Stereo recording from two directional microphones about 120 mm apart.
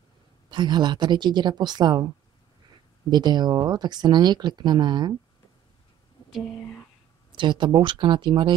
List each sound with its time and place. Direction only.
0.5 s speech: 40° right (ahead or behind)
3.1 s speech: 35° right (ahead or behind)
7.3 s speech: 40° right (ahead or behind)